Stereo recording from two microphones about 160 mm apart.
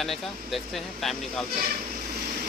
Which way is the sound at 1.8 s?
60° right (ahead or behind).